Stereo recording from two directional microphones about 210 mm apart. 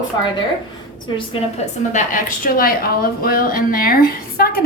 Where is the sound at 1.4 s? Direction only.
35° left (ahead or behind).